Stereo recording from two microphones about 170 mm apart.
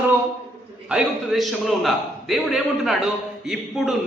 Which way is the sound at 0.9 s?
Centre (ahead or behind).